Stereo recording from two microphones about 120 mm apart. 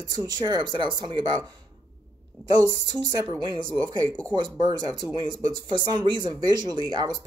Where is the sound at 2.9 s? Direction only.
35° right (ahead or behind).